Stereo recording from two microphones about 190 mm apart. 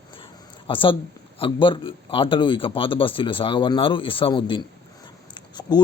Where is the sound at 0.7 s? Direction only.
25° left (ahead or behind).